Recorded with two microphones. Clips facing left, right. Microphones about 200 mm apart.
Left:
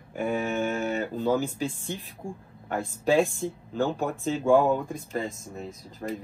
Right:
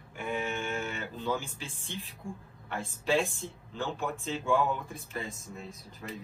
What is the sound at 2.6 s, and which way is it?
Speech, 45° left (ahead or behind).